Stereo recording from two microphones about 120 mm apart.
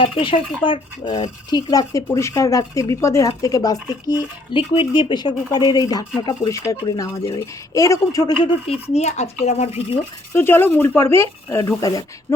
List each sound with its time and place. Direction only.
0.0 s speech: 45° left (ahead or behind)
4.5 s speech: 45° left (ahead or behind)
8.4 s speech: 55° left (ahead or behind)
10.3 s speech: 20° left (ahead or behind)